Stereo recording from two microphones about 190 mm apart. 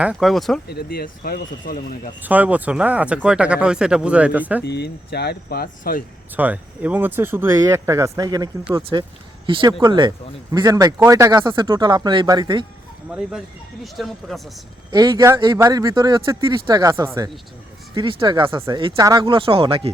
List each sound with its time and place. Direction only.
0.0 s speech: 5° right (ahead or behind)
0.7 s speech: 55° left (ahead or behind)
2.2 s speech: 10° right (ahead or behind)
4.6 s speech: 60° left (ahead or behind)
6.3 s speech: 10° right (ahead or behind)
13.1 s speech: 5° right (ahead or behind)
14.8 s speech: 20° right (ahead or behind)